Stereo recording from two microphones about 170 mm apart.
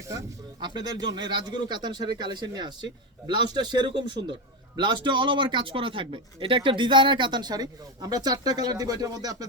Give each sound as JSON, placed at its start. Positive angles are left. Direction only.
{"t": 0.0, "sound": "a man's voice", "side_deg": -20}